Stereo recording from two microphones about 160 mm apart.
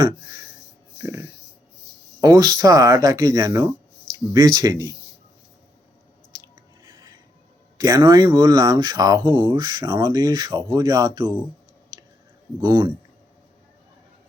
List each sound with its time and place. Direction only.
1.0 s speech: 20° right (ahead or behind)
7.8 s speech: 20° right (ahead or behind)
12.5 s speech: 30° right (ahead or behind)